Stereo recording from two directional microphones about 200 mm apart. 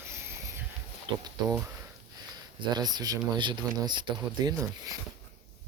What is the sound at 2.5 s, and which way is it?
Speech, 20° right (ahead or behind).